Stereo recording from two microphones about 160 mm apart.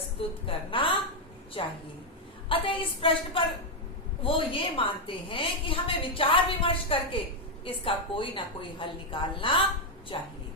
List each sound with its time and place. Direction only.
0.2 s a woman's voice: 35° left (ahead or behind)